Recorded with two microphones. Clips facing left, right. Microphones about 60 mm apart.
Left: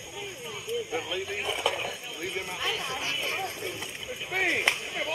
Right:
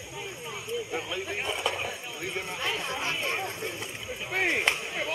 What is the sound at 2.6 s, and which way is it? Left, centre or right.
Speech, centre.